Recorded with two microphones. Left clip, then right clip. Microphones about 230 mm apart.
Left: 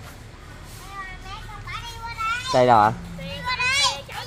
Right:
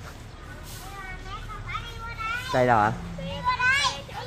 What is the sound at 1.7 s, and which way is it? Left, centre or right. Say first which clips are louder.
Children playing: even; left.